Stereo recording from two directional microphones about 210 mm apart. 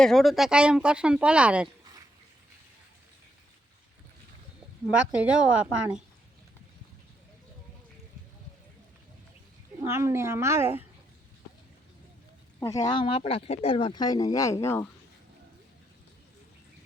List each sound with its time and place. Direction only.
0.0 s speech: centre (ahead or behind)
4.9 s speech: 5° right (ahead or behind)
9.8 s speech: 10° right (ahead or behind)
12.5 s speech: 15° left (ahead or behind)